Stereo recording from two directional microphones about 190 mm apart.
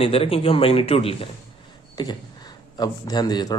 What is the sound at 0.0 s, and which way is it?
Speech, 30° left (ahead or behind).